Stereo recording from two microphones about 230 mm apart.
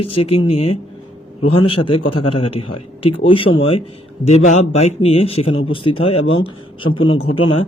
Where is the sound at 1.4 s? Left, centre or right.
Left.